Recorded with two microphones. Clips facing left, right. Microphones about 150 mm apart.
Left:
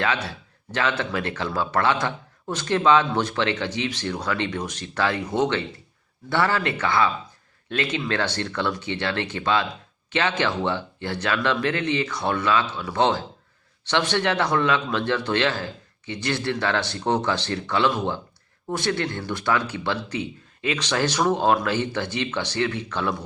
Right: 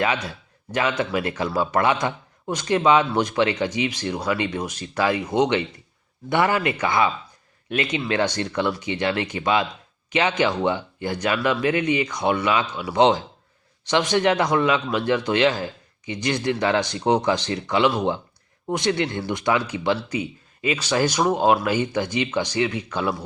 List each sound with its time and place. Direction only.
0.3 s a man's voice: 10° right (ahead or behind)